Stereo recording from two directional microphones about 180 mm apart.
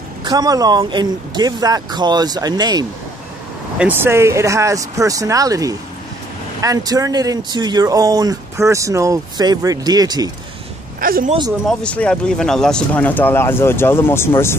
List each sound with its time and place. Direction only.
0.2 s speech: 20° right (ahead or behind)
3.7 s speech: 10° right (ahead or behind)
11.0 s a woman's voice: 55° right (ahead or behind)
11.6 s speech: 5° left (ahead or behind)